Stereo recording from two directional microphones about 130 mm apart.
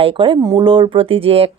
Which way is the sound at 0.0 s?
45° right (ahead or behind).